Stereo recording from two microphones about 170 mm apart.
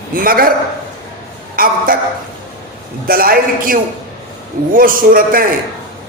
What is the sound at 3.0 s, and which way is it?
A man's voice, 60° right (ahead or behind).